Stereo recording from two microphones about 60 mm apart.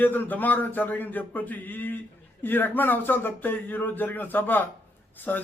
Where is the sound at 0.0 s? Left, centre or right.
Left.